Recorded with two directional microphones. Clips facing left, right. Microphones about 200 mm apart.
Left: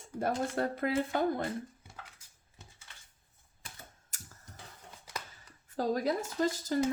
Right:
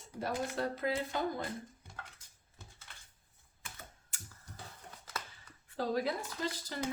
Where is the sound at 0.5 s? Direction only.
55° left (ahead or behind).